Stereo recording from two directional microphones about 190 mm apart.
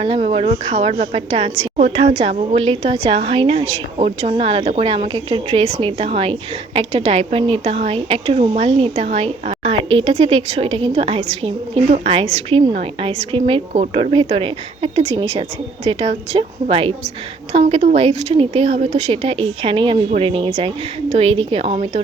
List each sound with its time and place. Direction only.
0.0 s a woman's voice: 30° right (ahead or behind)